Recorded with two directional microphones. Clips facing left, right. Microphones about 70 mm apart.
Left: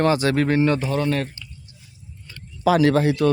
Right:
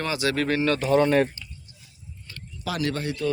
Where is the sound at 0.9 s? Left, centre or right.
Centre.